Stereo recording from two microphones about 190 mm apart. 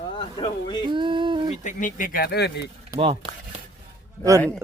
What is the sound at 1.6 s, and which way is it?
Speech, 45° left (ahead or behind).